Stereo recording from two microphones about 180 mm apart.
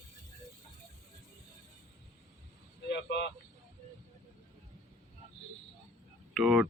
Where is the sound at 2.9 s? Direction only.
70° left (ahead or behind).